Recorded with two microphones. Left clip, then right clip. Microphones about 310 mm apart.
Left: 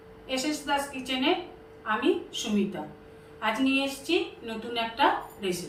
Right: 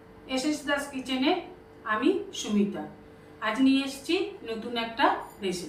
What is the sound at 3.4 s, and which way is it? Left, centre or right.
Speech, centre.